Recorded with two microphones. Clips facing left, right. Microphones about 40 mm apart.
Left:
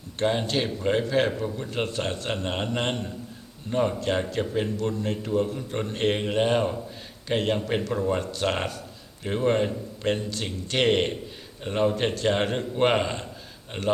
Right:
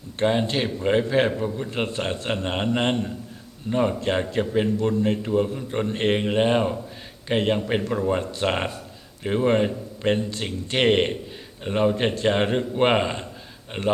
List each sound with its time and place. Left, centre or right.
0.2 s a man's voice: centre